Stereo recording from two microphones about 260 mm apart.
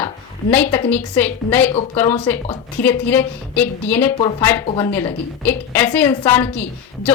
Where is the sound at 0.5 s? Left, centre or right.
Centre.